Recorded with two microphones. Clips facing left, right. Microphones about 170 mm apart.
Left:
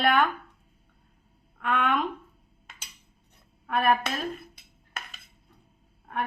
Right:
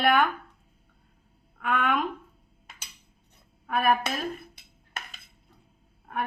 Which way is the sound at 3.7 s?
5° right (ahead or behind).